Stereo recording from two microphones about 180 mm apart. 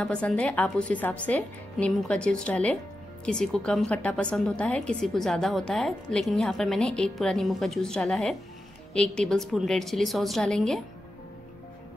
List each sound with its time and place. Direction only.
0.0 s a woman's voice: 5° left (ahead or behind)